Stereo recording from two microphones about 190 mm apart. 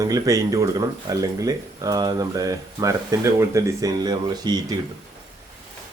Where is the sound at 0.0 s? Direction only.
20° right (ahead or behind).